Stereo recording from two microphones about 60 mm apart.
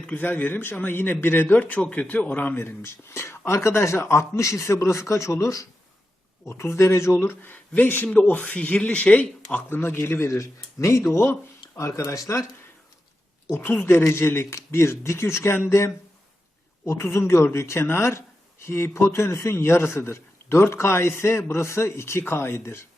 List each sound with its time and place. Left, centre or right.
0.1 s a man's voice: left
6.4 s a man's voice: left
7.2 s a man's voice: left
9.6 s a man's voice: left
10.2 s a man's voice: left
13.8 s a man's voice: left